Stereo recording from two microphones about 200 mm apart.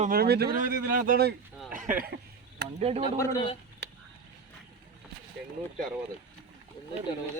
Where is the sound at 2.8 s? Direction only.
30° right (ahead or behind).